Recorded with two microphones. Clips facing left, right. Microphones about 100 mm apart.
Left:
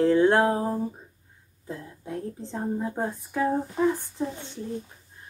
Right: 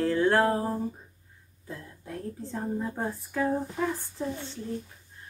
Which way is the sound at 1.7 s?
25° left (ahead or behind).